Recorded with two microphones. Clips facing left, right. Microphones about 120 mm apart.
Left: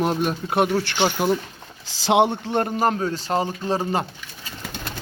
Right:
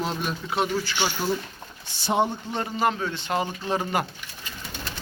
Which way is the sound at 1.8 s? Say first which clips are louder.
Left 6 dB; 90° left.